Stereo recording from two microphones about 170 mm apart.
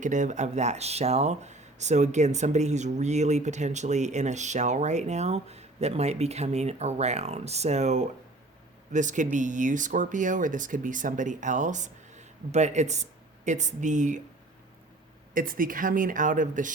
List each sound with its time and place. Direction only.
0.0 s speech: 45° right (ahead or behind)
15.3 s speech: 55° right (ahead or behind)